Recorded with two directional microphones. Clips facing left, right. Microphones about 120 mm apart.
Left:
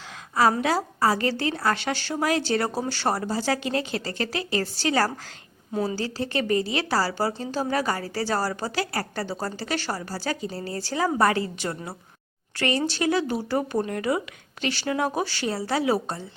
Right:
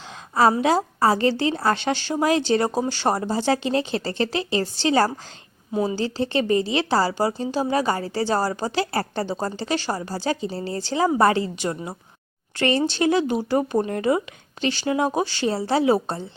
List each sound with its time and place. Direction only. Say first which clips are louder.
0.6 s a woman's voice: right 4 dB; 25° right (ahead or behind)